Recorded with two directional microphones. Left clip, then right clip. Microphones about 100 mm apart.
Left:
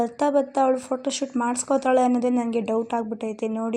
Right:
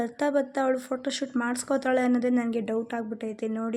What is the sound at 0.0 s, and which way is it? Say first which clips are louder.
A woman's voice: left 5 dB; 15° left (ahead or behind).